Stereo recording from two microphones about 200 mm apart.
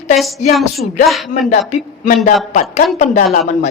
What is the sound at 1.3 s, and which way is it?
Speech, 40° left (ahead or behind).